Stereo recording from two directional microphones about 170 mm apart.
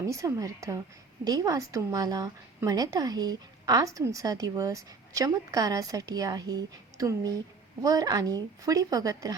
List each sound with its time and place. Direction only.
0.1 s a woman's voice: 20° right (ahead or behind)